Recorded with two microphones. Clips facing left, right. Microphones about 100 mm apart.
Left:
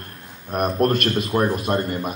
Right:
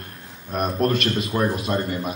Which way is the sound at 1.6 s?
45° left (ahead or behind).